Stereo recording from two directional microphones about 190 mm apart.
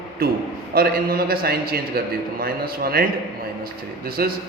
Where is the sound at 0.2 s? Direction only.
55° right (ahead or behind).